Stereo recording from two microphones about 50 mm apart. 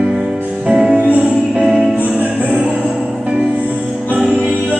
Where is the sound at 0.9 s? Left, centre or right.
Right.